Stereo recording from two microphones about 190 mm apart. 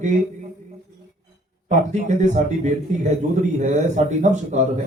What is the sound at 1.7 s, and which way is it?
A man's voice, 40° right (ahead or behind).